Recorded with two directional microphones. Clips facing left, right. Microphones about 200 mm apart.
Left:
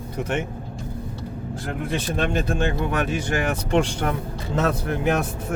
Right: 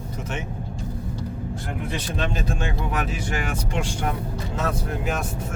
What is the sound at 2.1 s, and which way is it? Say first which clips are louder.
Speech: left 5 dB; 55° left (ahead or behind).